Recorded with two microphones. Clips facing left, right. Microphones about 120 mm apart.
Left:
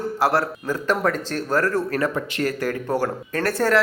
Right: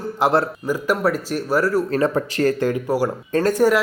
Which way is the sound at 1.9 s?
30° right (ahead or behind).